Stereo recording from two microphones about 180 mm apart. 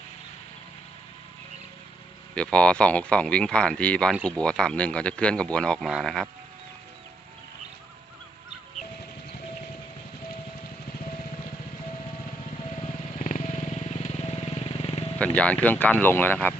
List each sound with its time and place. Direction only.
2.3 s speech: 5° left (ahead or behind)
13.1 s motorcycle: 45° left (ahead or behind)
15.6 s speech: 10° left (ahead or behind)